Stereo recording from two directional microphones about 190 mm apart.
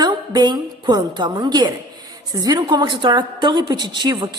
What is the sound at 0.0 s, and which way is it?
A woman's voice, 20° right (ahead or behind).